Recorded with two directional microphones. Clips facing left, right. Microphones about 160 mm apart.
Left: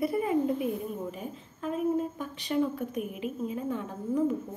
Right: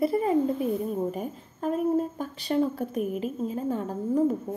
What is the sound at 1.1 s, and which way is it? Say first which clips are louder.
Speech: right 6 dB; 45° right (ahead or behind).